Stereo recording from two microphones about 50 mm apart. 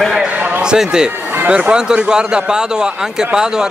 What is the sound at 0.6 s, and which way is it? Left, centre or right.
Speech, centre.